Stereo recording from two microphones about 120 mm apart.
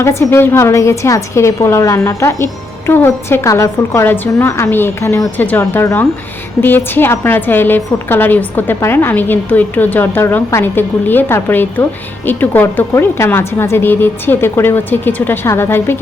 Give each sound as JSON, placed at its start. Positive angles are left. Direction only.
{"t": 0.0, "sound": "a woman's voice", "side_deg": 25}